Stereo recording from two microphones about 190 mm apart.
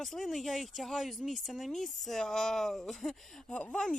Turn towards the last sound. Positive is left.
turn(degrees=5)  # may be behind; listen again after turning